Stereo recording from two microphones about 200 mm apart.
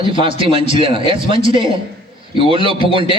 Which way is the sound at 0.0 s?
25° right (ahead or behind).